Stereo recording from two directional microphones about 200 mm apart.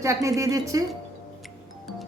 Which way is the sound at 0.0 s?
15° right (ahead or behind).